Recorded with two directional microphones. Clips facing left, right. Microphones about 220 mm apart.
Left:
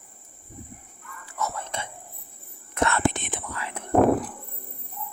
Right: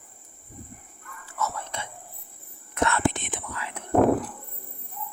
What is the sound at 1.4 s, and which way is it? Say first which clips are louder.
Whispering: even; 15° left (ahead or behind).